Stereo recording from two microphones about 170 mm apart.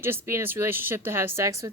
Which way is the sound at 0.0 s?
15° right (ahead or behind).